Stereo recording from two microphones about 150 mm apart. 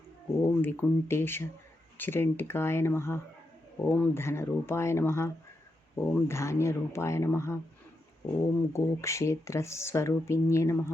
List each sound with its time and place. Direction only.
0.6 s speech: 15° left (ahead or behind)
8.7 s speech: 20° left (ahead or behind)